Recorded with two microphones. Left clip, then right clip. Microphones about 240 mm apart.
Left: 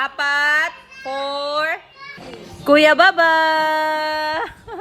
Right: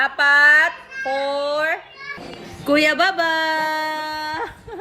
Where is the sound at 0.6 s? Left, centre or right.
Centre.